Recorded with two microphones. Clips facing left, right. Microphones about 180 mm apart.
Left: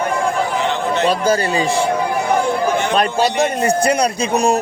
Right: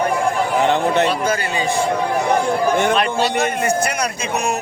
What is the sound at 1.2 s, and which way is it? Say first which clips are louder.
Speech: left 4 dB; 35° left (ahead or behind).